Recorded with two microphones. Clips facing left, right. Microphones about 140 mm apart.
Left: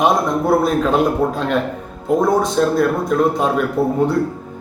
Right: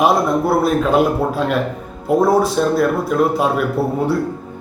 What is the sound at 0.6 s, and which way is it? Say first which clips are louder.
A man's voice: right 1 dB; 5° right (ahead or behind).